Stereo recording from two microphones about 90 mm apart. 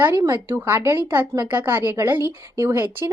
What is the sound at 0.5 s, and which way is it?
Speech, 25° right (ahead or behind).